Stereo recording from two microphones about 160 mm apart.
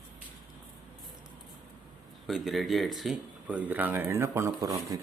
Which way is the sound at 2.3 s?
Centre (ahead or behind).